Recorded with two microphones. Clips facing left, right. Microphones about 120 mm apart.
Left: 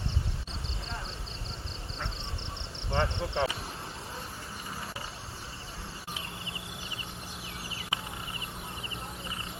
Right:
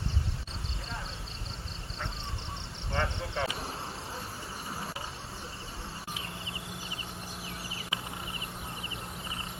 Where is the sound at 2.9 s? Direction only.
25° left (ahead or behind).